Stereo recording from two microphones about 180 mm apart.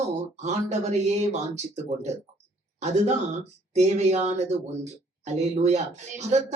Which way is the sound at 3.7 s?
40° right (ahead or behind).